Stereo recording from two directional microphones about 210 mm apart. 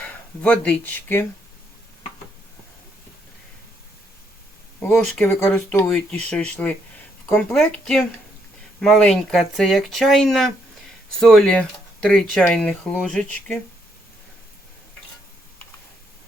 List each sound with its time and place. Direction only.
0.0 s speech: 5° left (ahead or behind)
4.8 s speech: 5° left (ahead or behind)